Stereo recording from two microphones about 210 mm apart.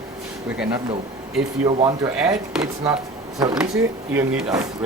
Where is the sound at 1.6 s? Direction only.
20° right (ahead or behind).